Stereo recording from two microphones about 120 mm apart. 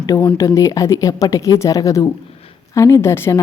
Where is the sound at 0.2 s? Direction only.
20° left (ahead or behind).